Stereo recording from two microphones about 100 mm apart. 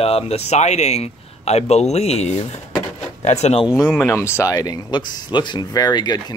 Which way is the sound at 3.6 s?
5° right (ahead or behind).